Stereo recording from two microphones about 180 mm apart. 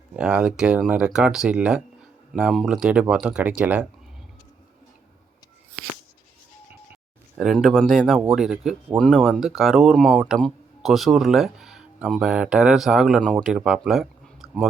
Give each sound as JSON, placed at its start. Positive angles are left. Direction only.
{"t": 0.2, "sound": "speech", "side_deg": -5}
{"t": 7.3, "sound": "speech", "side_deg": 0}